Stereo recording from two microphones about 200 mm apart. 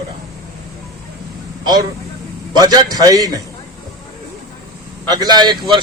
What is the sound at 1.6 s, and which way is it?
A man's voice, 20° right (ahead or behind).